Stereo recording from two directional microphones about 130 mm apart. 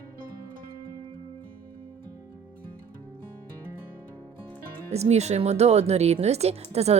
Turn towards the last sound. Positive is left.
turn(degrees=-55)  # may be behind; listen again after turning